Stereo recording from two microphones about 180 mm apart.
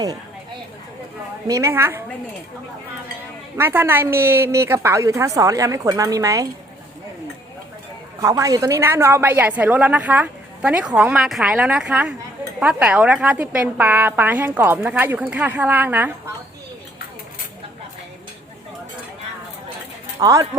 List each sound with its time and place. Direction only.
1.5 s a woman's voice: 15° right (ahead or behind)
3.6 s a woman's voice: 10° right (ahead or behind)
8.2 s a woman's voice: 20° right (ahead or behind)
20.2 s speech: 20° right (ahead or behind)